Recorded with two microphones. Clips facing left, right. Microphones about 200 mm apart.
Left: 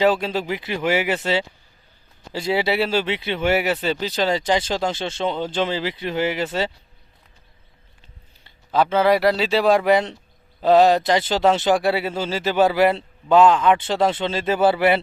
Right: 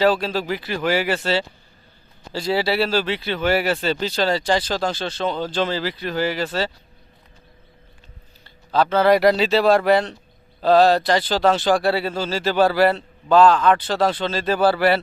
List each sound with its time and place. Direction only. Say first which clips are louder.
0.0 s speech: even; 20° left (ahead or behind)
8.4 s speech: even; 20° left (ahead or behind)